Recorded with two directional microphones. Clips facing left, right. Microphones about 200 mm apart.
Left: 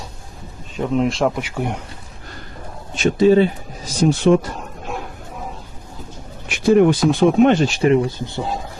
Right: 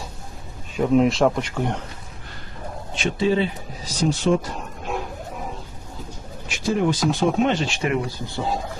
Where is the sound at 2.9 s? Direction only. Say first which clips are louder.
Left 8 dB; 45° left (ahead or behind); by 4.3 s 60° left (ahead or behind).